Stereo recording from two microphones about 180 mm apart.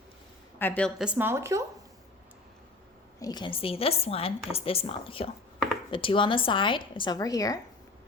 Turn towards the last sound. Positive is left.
turn(degrees=20)  # may be behind; listen again after turning